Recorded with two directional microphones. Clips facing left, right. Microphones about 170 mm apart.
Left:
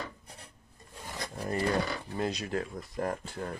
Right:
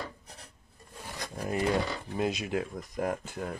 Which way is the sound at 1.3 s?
15° right (ahead or behind).